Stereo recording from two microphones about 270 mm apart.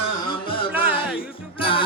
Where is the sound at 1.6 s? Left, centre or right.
Centre.